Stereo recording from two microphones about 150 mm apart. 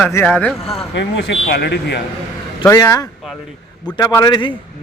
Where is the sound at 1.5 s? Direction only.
90° left.